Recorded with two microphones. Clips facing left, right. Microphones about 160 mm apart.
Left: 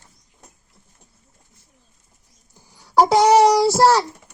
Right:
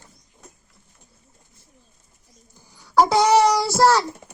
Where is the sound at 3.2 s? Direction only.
40° left (ahead or behind).